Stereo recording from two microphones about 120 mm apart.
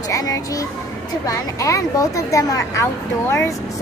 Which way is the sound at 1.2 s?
25° left (ahead or behind).